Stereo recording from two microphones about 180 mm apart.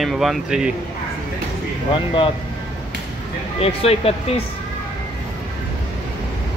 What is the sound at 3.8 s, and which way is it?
Speech, 35° left (ahead or behind).